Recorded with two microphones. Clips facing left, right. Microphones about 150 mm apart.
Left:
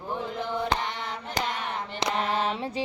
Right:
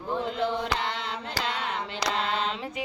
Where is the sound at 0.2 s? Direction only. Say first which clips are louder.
Right 2 dB; 90° right.